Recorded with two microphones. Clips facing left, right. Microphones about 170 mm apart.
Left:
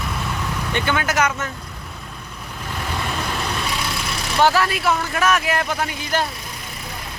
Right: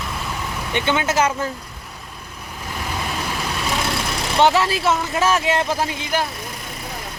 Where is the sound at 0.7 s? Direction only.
25° right (ahead or behind).